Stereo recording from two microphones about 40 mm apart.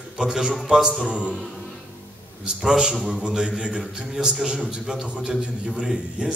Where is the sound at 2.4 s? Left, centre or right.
Right.